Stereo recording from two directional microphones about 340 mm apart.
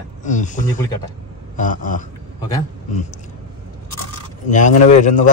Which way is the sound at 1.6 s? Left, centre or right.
Left.